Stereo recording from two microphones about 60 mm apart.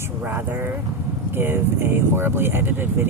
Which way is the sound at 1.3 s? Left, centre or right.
Right.